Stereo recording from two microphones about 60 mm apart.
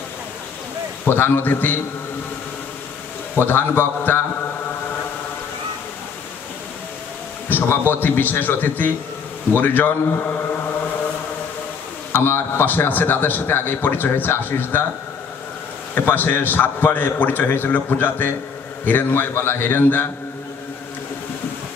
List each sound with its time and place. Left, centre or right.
1.0 s a man's voice: left
3.3 s a man's voice: left
7.4 s a sound: left
7.9 s a man's voice: left
12.1 s a man's voice: left
15.9 s a man's voice: left